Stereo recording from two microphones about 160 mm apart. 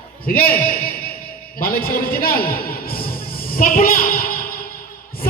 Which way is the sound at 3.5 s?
65° left (ahead or behind).